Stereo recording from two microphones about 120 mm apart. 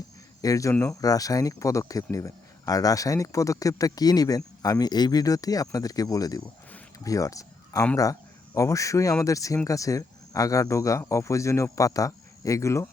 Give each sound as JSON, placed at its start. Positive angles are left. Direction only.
{"t": 0.4, "sound": "a man's voice", "side_deg": 30}